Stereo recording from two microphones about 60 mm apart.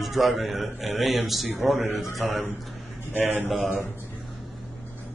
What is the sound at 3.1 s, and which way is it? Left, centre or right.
Speech, right.